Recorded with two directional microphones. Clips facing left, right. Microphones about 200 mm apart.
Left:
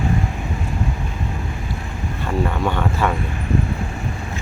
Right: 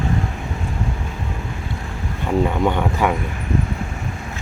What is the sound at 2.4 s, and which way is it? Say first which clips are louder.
Speech: right 2 dB; 15° right (ahead or behind).